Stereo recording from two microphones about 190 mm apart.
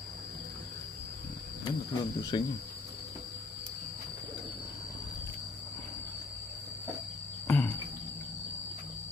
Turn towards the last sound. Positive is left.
turn(degrees=10)  # may be behind; listen again after turning